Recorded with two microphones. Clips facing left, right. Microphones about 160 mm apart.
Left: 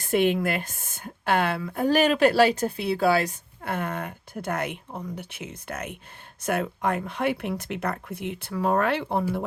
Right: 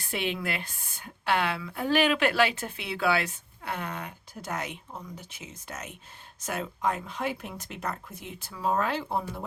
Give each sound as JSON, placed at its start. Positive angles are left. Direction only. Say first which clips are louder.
{"t": 0.0, "sound": "speech", "louder": "left 9 dB", "side_deg": 50}